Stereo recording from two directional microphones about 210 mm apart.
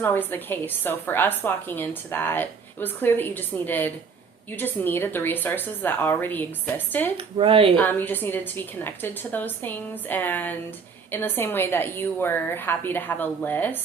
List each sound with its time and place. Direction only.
0.0 s a woman's voice: 10° left (ahead or behind)
7.3 s speech: 25° right (ahead or behind)
7.8 s a woman's voice: 10° left (ahead or behind)